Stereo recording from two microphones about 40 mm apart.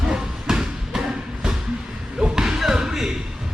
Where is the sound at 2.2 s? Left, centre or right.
Centre.